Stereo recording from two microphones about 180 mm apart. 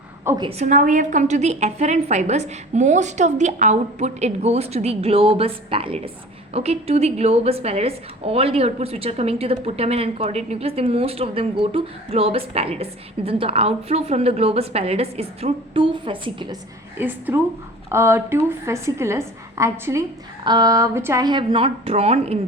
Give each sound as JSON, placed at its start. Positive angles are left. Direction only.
{"t": 0.3, "sound": "a woman's voice", "side_deg": -25}
{"t": 0.6, "sound": "a woman's voice", "side_deg": -45}
{"t": 17.0, "sound": "a woman's voice", "side_deg": -10}